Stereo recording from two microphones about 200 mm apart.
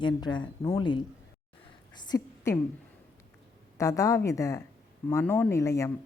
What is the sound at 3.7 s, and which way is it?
A woman's voice, 15° left (ahead or behind).